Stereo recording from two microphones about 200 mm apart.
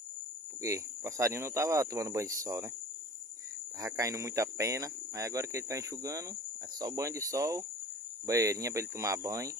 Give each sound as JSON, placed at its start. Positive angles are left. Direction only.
{"t": 0.6, "sound": "speech", "side_deg": -15}
{"t": 3.8, "sound": "speech", "side_deg": -15}